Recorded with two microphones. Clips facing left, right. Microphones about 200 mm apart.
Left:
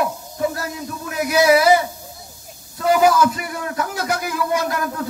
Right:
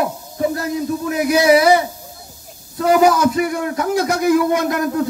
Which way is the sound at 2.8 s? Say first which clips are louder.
Right 2 dB; 25° right (ahead or behind).